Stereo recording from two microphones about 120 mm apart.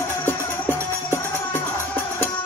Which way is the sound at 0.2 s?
20° left (ahead or behind).